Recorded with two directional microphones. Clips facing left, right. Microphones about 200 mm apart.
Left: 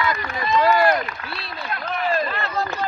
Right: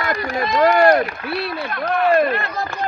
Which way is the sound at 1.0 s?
55° right (ahead or behind).